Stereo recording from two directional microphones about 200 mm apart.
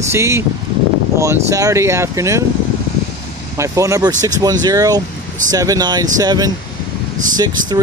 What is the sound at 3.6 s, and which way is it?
Speech, 15° right (ahead or behind).